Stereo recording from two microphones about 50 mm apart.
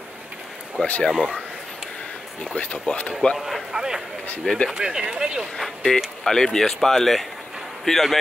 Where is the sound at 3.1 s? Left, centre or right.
Centre.